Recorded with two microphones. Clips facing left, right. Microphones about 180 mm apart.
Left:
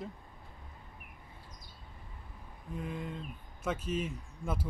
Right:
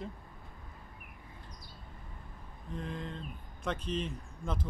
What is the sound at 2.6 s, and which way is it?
Speech, 10° left (ahead or behind).